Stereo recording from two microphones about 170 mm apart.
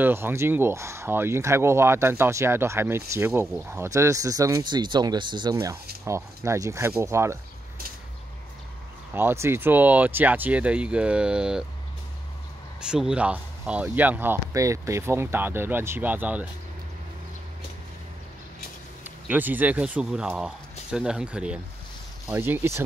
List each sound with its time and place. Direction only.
0.0 s speech: 15° right (ahead or behind)
9.1 s speech: 15° right (ahead or behind)
12.9 s speech: 5° right (ahead or behind)
19.0 s speech: 10° right (ahead or behind)